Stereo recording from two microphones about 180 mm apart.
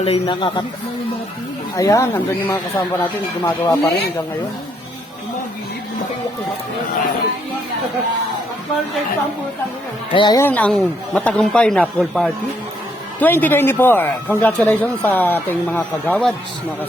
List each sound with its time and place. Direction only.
0.0 s speech: 30° left (ahead or behind)
1.7 s speech: 20° left (ahead or behind)
10.1 s speech: 25° left (ahead or behind)
10.4 s speech: 10° left (ahead or behind)